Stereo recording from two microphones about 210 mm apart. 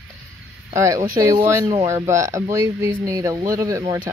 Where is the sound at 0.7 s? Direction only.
15° right (ahead or behind).